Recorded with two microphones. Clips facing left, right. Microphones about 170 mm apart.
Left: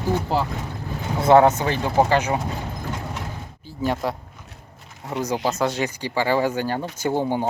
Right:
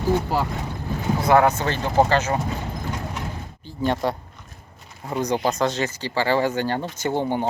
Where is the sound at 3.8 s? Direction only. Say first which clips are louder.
Right 1 dB; 5° left (ahead or behind).